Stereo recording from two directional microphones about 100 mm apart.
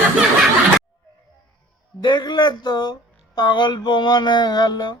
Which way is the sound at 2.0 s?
50° left (ahead or behind).